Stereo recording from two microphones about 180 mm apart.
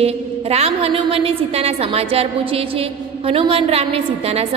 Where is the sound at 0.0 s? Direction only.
35° right (ahead or behind).